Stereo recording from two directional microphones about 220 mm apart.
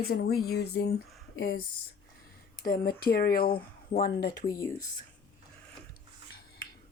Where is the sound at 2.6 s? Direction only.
40° left (ahead or behind).